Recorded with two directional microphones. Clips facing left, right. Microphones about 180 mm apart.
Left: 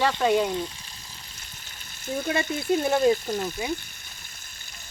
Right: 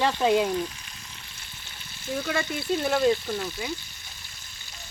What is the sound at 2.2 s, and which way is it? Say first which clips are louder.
Frying: left 3 dB; 20° left (ahead or behind).